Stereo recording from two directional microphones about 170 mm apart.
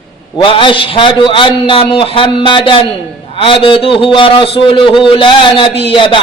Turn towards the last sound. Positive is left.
turn(degrees=30)  # may be behind; listen again after turning